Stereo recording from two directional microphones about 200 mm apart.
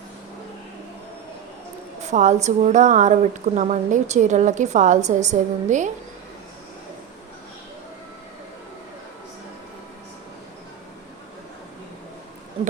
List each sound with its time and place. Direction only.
2.0 s a woman's voice: 35° right (ahead or behind)